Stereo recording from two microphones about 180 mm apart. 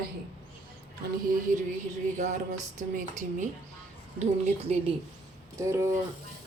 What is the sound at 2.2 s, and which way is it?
Speech, 45° right (ahead or behind).